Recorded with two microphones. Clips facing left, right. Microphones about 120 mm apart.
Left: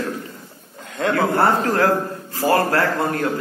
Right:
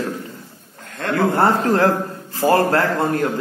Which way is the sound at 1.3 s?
20° right (ahead or behind).